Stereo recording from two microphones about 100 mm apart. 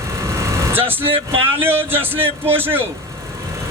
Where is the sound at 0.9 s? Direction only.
20° right (ahead or behind).